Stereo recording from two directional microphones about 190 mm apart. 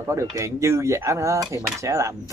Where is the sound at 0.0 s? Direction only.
15° right (ahead or behind).